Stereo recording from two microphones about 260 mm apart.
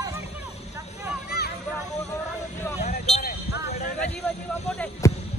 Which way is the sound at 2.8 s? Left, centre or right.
Left.